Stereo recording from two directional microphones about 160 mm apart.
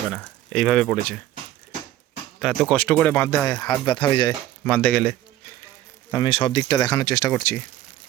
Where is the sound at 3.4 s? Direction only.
20° left (ahead or behind).